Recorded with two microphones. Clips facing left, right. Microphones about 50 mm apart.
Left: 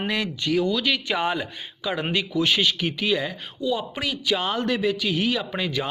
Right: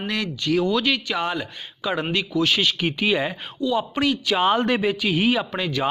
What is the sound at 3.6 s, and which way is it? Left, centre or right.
Speech, centre.